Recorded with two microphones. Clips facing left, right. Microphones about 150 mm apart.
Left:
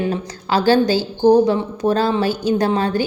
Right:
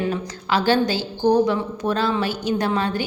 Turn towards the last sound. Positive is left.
turn(degrees=35)  # may be behind; listen again after turning